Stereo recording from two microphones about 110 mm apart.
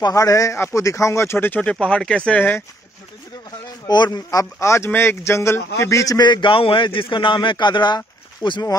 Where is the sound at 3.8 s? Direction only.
40° left (ahead or behind).